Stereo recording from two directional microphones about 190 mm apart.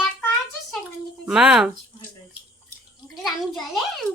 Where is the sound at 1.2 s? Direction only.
5° right (ahead or behind).